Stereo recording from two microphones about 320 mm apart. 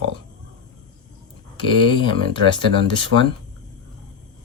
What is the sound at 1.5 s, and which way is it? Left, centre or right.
Speech, centre.